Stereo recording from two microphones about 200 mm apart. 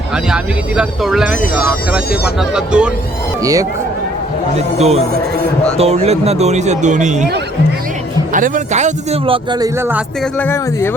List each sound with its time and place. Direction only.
0.8 s speech: 5° right (ahead or behind)
3.4 s speech: 15° right (ahead or behind)
4.5 s speech: 35° right (ahead or behind)
8.3 s speech: 40° right (ahead or behind); by 9.6 s 25° right (ahead or behind)
10.4 s speech: 10° left (ahead or behind)